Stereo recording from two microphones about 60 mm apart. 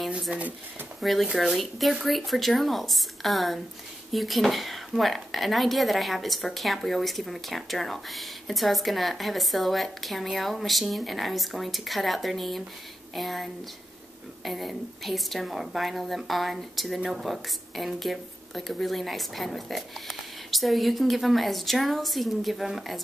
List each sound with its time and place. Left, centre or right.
0.3 s speech: right
1.0 s a woman's voice: centre